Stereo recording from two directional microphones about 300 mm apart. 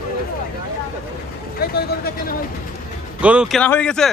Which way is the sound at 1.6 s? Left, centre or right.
Left.